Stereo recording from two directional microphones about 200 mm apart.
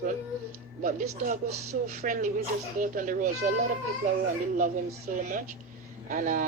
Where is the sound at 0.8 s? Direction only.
40° right (ahead or behind).